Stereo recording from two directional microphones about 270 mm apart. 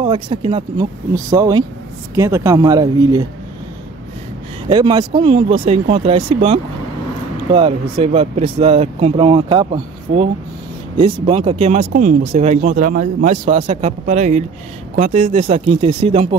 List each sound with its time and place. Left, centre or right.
0.0 s speech: centre
4.6 s speech: centre